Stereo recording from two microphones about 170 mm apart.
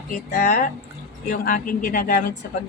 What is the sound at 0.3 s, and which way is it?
A woman's voice, 60° left (ahead or behind).